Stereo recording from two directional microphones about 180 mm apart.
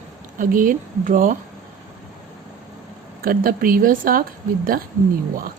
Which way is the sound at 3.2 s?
55° right (ahead or behind).